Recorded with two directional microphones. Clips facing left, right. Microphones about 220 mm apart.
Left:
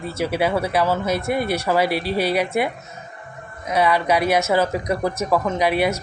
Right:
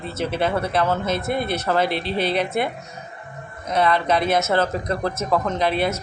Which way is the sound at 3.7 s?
10° left (ahead or behind).